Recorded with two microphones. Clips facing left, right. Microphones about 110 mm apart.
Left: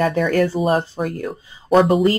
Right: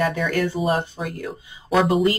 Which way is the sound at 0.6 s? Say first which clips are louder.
Left 4 dB; 35° left (ahead or behind).